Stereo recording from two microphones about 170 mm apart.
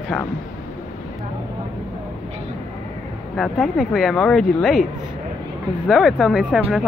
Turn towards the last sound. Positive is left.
turn(degrees=0)  # may be behind; listen again after turning